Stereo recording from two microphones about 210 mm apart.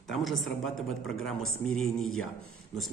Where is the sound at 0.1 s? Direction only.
Centre (ahead or behind).